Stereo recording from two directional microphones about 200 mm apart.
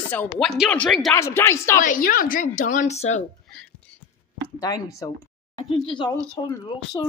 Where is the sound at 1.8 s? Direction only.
45° left (ahead or behind).